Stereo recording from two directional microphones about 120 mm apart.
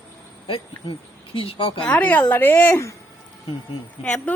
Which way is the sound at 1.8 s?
10° left (ahead or behind).